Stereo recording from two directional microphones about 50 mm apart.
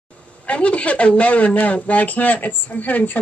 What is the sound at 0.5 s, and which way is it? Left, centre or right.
Speech, left.